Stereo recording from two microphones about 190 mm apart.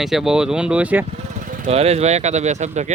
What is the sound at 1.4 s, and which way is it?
Speech, 45° right (ahead or behind).